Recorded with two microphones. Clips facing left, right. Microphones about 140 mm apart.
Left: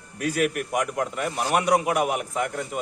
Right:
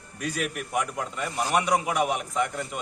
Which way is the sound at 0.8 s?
60° left (ahead or behind).